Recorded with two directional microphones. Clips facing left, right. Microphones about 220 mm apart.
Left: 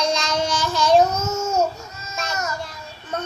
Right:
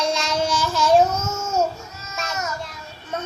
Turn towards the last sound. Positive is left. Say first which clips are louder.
# left 1 dB
turn(degrees=0)  # may be behind; listen again after turning